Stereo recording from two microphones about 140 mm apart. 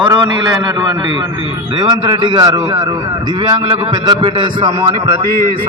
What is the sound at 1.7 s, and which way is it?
A man's voice, 30° right (ahead or behind).